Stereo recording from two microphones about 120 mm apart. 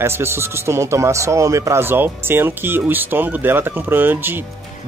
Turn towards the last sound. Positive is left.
turn(degrees=-15)  # may be behind; listen again after turning